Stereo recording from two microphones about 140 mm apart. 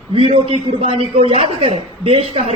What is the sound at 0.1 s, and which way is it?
Speech, 45° right (ahead or behind).